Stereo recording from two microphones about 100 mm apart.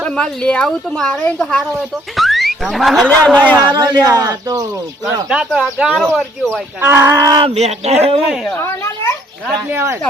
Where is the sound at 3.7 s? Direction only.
40° right (ahead or behind).